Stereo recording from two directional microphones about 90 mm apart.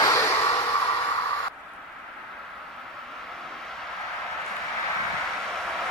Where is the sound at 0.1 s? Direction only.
30° left (ahead or behind).